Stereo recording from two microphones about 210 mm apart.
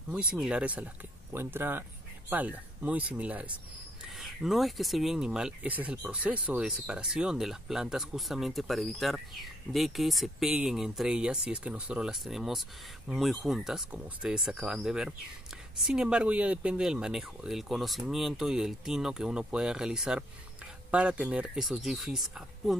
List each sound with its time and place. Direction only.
0.1 s speech: 5° right (ahead or behind)